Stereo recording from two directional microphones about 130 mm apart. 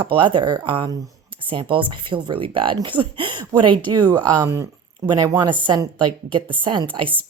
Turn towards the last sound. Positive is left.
turn(degrees=-40)  # may be behind; listen again after turning